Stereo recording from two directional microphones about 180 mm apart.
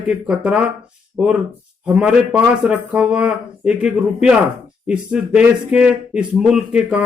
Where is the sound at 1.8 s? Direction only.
5° right (ahead or behind).